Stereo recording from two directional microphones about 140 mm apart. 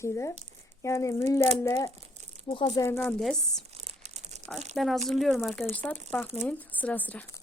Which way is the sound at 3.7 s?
50° right (ahead or behind).